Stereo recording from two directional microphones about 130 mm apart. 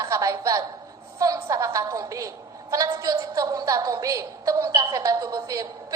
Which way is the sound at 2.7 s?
25° right (ahead or behind).